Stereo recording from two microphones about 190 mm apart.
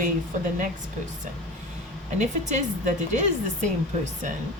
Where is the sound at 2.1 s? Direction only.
40° right (ahead or behind).